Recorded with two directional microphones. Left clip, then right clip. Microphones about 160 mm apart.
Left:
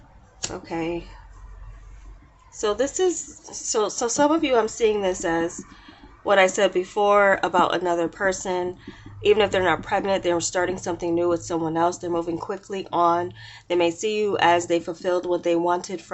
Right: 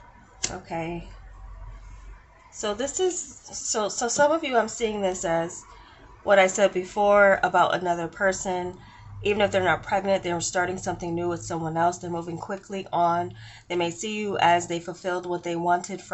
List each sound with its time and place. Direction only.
0.7 s a woman's voice: 35° left (ahead or behind)
2.6 s a woman's voice: 35° left (ahead or behind)